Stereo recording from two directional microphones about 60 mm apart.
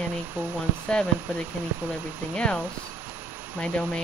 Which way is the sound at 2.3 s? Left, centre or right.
Centre.